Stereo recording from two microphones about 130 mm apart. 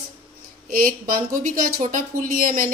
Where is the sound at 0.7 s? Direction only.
90° right.